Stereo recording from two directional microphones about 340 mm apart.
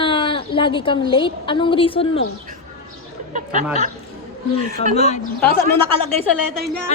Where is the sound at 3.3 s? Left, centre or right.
Right.